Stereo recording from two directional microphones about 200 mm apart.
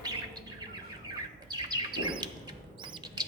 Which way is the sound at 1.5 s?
20° right (ahead or behind).